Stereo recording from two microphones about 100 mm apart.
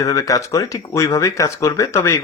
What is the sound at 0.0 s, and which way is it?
Speech, 35° left (ahead or behind).